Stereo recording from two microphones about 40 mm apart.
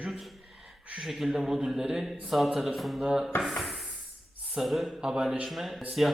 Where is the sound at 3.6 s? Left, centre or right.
Centre.